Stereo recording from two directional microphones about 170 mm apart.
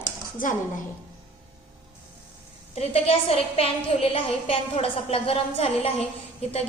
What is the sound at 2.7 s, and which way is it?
A woman's voice, 35° left (ahead or behind).